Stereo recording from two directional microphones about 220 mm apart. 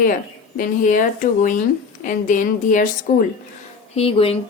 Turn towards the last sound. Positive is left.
turn(degrees=25)  # may be behind; listen again after turning